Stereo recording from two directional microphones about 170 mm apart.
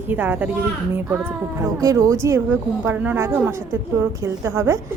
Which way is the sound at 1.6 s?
20° right (ahead or behind).